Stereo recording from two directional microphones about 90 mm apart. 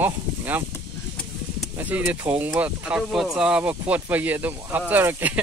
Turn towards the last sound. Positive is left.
turn(degrees=-20)  # may be behind; listen again after turning